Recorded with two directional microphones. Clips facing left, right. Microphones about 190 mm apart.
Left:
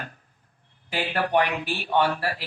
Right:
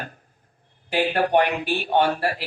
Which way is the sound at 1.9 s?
45° right (ahead or behind).